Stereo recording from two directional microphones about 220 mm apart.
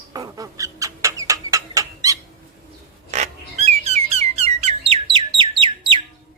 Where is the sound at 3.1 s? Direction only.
30° right (ahead or behind).